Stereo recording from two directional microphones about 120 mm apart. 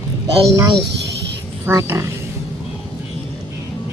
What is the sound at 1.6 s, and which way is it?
Speech, 20° right (ahead or behind).